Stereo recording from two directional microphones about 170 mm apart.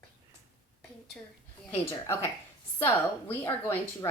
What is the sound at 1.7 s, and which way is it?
Speech, 15° left (ahead or behind).